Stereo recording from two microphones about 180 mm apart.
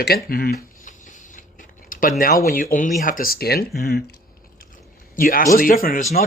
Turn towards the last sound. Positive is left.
turn(degrees=50)  # may be behind; listen again after turning